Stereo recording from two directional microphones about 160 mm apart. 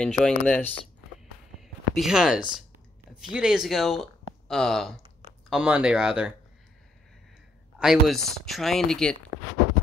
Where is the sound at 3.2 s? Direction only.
5° right (ahead or behind).